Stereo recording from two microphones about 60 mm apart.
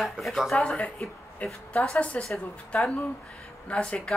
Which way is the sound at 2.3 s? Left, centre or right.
Centre.